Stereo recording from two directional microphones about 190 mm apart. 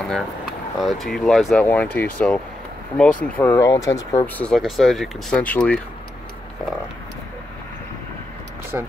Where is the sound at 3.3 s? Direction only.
10° left (ahead or behind).